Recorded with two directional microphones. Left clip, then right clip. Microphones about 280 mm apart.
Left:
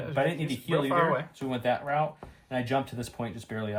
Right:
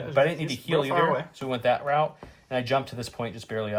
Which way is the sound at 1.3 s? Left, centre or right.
Right.